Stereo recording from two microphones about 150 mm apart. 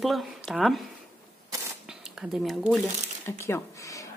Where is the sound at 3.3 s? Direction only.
15° left (ahead or behind).